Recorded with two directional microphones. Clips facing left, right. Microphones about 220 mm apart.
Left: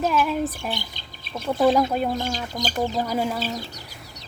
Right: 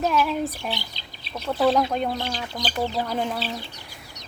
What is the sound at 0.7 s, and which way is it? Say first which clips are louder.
Chirp: left 1 dB; 50° left (ahead or behind).